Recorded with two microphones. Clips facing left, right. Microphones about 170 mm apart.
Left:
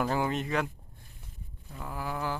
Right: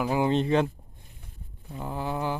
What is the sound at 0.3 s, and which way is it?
Speech, 30° right (ahead or behind).